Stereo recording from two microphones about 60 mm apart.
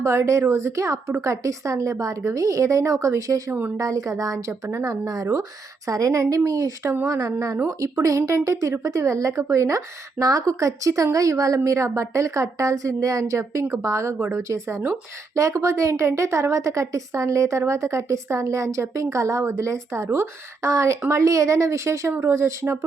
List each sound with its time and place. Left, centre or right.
0.0 s a woman's voice: right
13.7 s speech: right